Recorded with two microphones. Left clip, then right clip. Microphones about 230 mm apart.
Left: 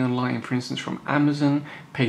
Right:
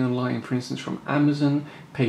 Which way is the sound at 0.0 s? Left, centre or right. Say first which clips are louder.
Left 1 dB; centre.